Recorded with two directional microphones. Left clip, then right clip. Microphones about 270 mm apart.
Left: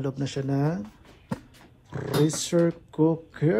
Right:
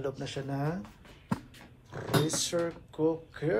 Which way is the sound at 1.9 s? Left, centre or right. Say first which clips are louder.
Left 5 dB; left.